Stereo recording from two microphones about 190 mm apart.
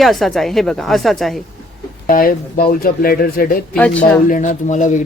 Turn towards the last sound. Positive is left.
turn(degrees=40)  # may be behind; listen again after turning